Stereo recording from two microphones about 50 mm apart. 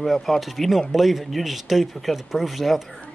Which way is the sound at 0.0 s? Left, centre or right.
Centre.